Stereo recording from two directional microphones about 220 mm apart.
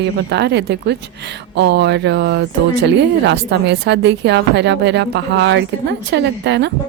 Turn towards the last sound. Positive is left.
turn(degrees=-50)  # may be behind; listen again after turning